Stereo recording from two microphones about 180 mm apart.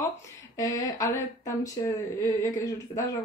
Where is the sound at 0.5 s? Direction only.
15° left (ahead or behind).